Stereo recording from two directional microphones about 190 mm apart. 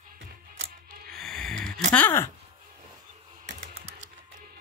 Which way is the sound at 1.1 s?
Centre (ahead or behind).